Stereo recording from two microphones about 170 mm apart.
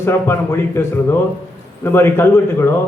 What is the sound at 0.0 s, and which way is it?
A man's voice, 15° left (ahead or behind).